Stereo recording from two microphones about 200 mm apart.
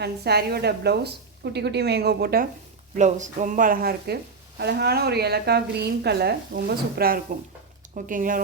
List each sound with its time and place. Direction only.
0.0 s a woman's voice: 55° right (ahead or behind)
3.0 s a woman's voice: 35° right (ahead or behind)